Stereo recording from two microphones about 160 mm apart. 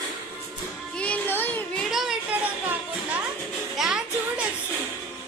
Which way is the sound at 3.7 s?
5° right (ahead or behind).